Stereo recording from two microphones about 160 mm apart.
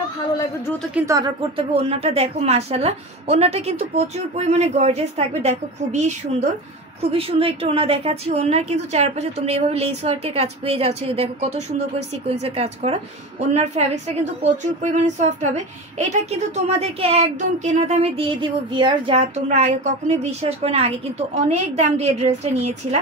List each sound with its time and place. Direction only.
1.0 s speech: 20° right (ahead or behind)
1.4 s a woman's voice: 35° right (ahead or behind)